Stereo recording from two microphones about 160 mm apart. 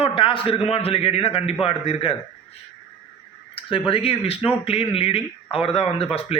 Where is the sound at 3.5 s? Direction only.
35° left (ahead or behind).